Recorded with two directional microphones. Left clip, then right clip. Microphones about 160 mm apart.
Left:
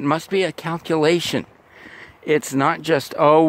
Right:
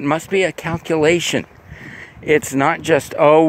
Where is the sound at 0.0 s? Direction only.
35° left (ahead or behind).